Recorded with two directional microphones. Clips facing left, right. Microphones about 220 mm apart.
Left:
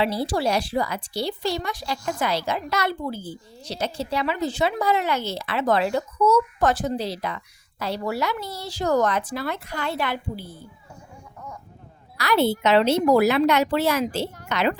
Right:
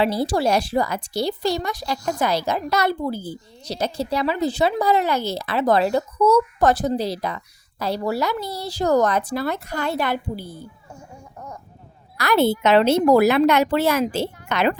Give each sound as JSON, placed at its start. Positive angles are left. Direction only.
{"t": 0.0, "sound": "speech", "side_deg": -45}
{"t": 12.1, "sound": "a woman's voice", "side_deg": -50}